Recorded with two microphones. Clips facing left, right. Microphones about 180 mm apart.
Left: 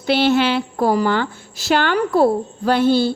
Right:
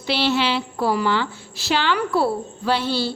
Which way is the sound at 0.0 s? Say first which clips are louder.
Left 5 dB; 50° left (ahead or behind).